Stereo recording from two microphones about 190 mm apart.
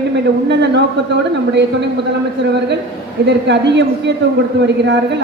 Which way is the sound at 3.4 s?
65° right (ahead or behind).